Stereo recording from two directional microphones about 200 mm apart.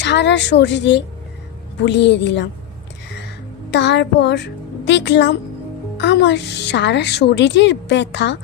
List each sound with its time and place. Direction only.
0.0 s a woman's voice: 60° left (ahead or behind)
3.7 s a child's voice: 60° left (ahead or behind)